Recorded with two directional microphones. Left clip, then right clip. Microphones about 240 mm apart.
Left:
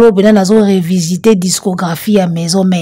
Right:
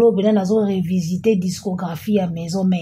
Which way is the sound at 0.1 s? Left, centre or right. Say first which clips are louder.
Left 9 dB; left.